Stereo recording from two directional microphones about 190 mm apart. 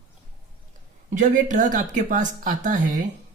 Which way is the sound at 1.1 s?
45° right (ahead or behind).